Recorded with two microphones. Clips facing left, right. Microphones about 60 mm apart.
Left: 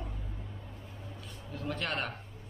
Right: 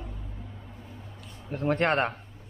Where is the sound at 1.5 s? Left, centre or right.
Right.